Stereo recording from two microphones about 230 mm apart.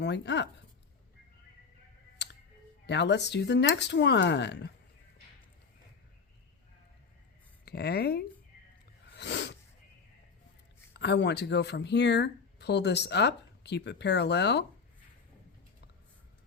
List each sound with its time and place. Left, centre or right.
0.0 s speech: left
2.2 s clicking: left
2.8 s speech: left
7.6 s speech: left
9.1 s sneeze: left
10.9 s speech: left